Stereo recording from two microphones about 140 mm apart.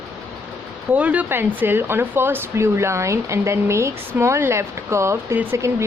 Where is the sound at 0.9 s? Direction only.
10° right (ahead or behind).